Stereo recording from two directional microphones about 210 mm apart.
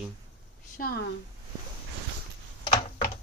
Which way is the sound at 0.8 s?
45° left (ahead or behind).